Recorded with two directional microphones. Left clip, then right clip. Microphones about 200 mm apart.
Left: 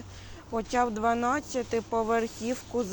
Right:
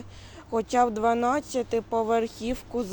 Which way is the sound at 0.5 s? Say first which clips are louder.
Right 4 dB; 25° right (ahead or behind).